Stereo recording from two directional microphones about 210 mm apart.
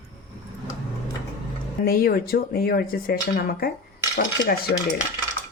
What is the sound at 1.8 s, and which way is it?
Speech, 45° left (ahead or behind).